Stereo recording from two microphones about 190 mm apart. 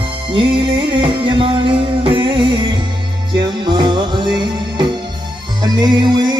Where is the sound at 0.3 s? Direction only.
25° right (ahead or behind).